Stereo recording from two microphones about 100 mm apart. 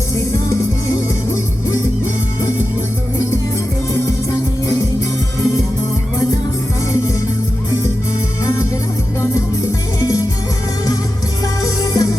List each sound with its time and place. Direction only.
10.0 s music: 35° left (ahead or behind)
11.6 s music: 35° left (ahead or behind)